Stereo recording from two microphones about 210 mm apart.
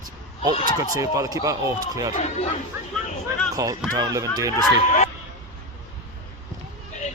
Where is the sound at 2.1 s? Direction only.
30° left (ahead or behind).